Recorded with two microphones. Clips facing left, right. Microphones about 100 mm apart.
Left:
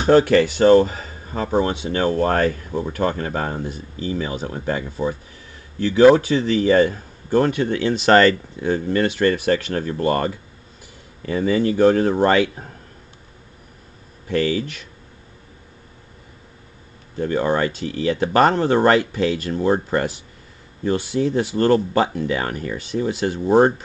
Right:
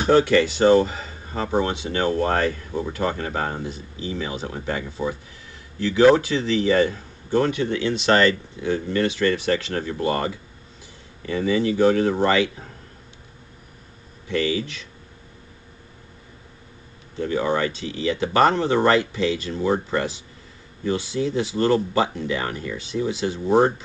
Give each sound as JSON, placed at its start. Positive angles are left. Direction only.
{"t": 0.1, "sound": "a man's voice", "side_deg": 45}
{"t": 6.1, "sound": "a man's voice", "side_deg": 45}
{"t": 14.2, "sound": "a man's voice", "side_deg": 45}
{"t": 17.2, "sound": "a man's voice", "side_deg": 45}